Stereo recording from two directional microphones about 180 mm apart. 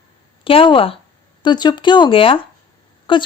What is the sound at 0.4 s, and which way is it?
Speech, 30° left (ahead or behind).